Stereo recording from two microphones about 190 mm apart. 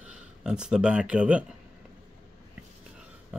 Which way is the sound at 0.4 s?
5° right (ahead or behind).